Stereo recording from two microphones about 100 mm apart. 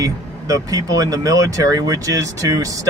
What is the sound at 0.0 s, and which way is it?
Speech, 35° right (ahead or behind).